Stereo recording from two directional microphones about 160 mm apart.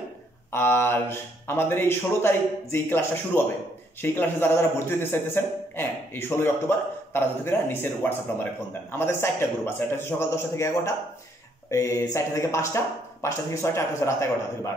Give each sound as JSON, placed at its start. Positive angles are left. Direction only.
{"t": 0.5, "sound": "speech", "side_deg": 15}